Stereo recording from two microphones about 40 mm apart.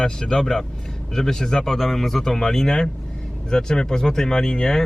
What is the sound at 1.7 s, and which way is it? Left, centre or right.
Speech, centre.